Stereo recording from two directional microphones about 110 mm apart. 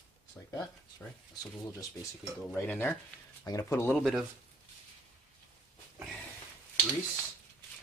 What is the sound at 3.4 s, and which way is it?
Speech, 25° left (ahead or behind).